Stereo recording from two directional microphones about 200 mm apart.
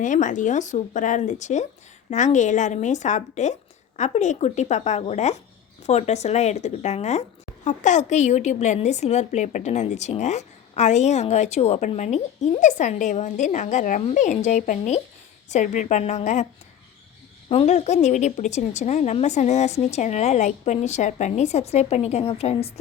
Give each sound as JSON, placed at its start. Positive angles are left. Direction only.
{"t": 0.0, "sound": "speech", "side_deg": 40}
{"t": 17.5, "sound": "speech", "side_deg": 30}